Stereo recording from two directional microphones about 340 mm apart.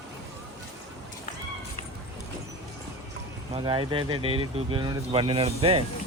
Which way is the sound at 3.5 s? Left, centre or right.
Centre.